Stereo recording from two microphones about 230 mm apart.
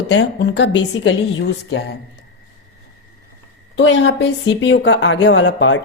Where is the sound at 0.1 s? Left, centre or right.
Left.